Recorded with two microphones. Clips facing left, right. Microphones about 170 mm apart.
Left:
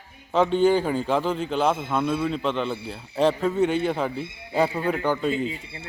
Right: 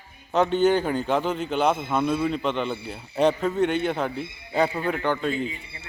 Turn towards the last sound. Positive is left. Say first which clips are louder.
# left 3 dB
turn(degrees=35)  # may be behind; listen again after turning